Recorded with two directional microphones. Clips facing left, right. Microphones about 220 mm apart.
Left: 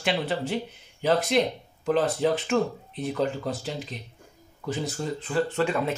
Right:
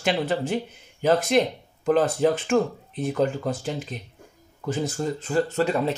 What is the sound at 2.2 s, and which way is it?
Speech, 45° right (ahead or behind).